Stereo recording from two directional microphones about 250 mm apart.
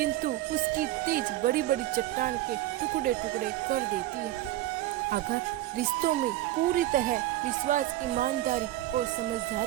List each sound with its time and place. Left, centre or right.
0.8 s speech: right
6.7 s speech: right